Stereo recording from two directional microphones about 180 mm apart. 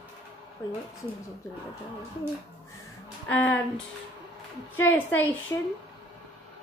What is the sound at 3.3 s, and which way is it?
Speech, 10° left (ahead or behind).